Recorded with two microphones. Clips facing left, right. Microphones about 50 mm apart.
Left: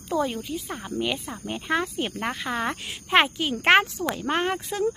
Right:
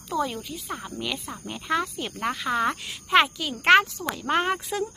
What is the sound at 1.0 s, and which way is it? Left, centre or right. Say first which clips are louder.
A child's voice: left 4 dB; centre.